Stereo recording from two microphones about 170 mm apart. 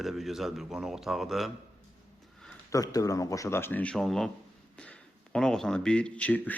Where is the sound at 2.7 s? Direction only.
20° left (ahead or behind).